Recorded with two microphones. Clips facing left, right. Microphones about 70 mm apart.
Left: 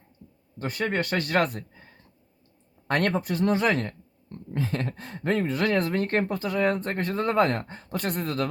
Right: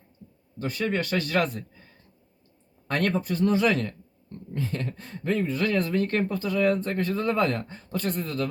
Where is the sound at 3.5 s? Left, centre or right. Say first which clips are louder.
Right 1 dB; left.